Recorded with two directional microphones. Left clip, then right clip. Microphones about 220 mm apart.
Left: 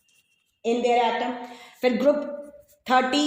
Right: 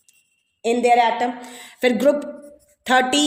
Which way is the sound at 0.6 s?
55° right (ahead or behind).